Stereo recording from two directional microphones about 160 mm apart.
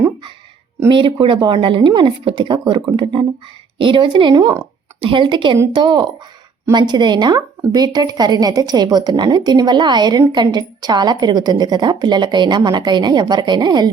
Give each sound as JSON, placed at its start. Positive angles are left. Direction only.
{"t": 0.9, "sound": "a woman's voice", "side_deg": -30}
{"t": 4.9, "sound": "a woman's voice", "side_deg": -30}